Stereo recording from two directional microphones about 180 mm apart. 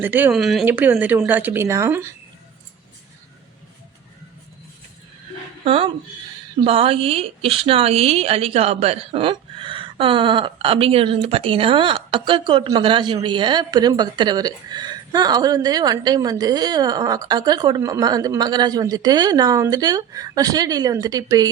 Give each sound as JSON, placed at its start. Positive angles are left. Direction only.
{"t": 0.0, "sound": "speech", "side_deg": -10}
{"t": 5.6, "sound": "a woman's voice", "side_deg": -30}